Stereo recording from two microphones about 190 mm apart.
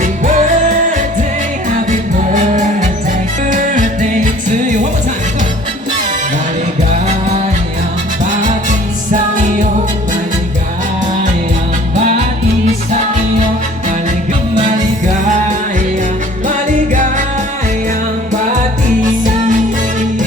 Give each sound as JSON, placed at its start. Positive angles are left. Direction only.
{"t": 0.0, "sound": "music", "side_deg": -40}
{"t": 1.9, "sound": "music", "side_deg": -40}
{"t": 16.9, "sound": "music", "side_deg": -40}